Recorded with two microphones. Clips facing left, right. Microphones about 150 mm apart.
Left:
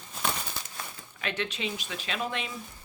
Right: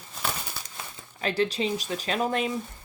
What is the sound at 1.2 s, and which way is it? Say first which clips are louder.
Speech: right 7 dB; 35° right (ahead or behind).